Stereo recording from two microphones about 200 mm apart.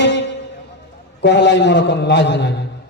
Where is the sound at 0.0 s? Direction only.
60° left (ahead or behind).